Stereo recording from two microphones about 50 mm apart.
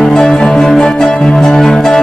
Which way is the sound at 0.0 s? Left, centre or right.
Centre.